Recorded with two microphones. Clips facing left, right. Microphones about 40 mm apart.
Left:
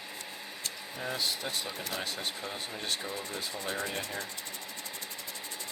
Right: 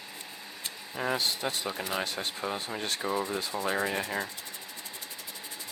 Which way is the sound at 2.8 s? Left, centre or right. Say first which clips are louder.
Right 6 dB; right.